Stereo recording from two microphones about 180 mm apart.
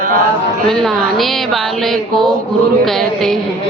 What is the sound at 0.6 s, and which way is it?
A woman's voice, centre (ahead or behind).